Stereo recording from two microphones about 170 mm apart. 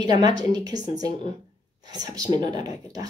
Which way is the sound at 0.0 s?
25° right (ahead or behind).